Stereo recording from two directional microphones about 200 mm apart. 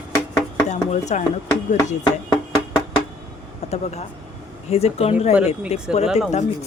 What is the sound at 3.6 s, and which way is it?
Air conditioning, 35° left (ahead or behind).